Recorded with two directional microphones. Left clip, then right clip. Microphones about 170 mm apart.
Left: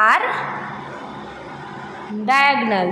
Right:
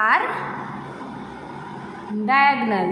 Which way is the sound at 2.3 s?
15° left (ahead or behind).